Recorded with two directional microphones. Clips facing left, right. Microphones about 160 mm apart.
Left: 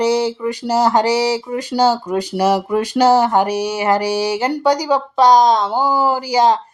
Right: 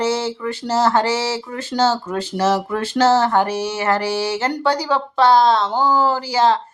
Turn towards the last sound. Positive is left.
turn(degrees=15)  # may be behind; listen again after turning